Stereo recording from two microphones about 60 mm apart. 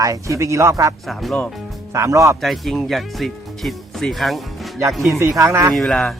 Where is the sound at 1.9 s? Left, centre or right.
Right.